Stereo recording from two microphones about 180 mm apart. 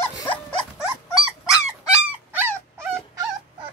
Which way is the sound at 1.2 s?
Centre (ahead or behind).